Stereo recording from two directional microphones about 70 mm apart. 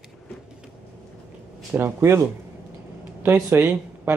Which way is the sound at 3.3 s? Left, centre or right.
Right.